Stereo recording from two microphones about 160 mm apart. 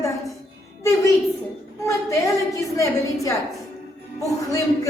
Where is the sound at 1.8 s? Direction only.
20° left (ahead or behind).